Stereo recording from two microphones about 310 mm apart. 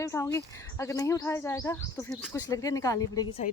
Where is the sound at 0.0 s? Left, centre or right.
Centre.